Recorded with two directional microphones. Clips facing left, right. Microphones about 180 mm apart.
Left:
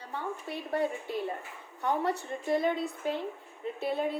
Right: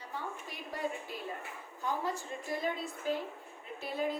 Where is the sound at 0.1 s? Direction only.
65° left (ahead or behind).